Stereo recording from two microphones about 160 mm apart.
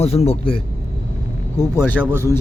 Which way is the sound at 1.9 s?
15° right (ahead or behind).